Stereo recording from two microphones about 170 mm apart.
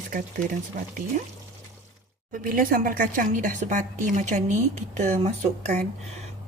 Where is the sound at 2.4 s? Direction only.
55° right (ahead or behind).